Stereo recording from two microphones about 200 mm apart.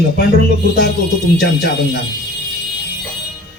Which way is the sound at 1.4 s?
55° left (ahead or behind).